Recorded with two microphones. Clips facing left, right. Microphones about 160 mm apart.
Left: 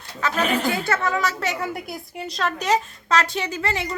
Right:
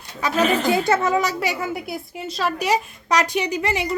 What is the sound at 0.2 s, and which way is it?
A woman's voice, 15° right (ahead or behind).